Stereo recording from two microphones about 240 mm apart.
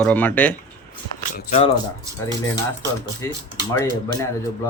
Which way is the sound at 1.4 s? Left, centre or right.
Left.